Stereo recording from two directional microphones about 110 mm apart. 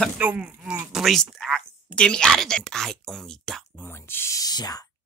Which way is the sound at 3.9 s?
20° left (ahead or behind).